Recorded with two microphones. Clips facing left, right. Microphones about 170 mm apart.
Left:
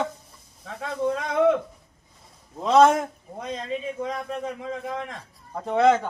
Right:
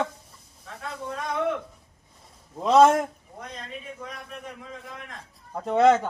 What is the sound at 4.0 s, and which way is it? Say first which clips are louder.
Speech: left 10 dB; 90° left.